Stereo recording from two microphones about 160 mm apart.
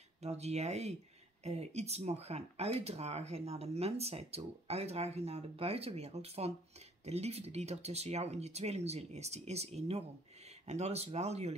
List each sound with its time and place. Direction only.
0.2 s speech: 40° right (ahead or behind)